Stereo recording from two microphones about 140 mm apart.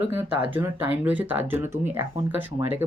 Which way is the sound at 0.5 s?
15° right (ahead or behind).